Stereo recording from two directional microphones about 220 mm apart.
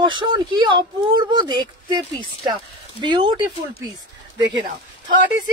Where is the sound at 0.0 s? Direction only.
20° right (ahead or behind).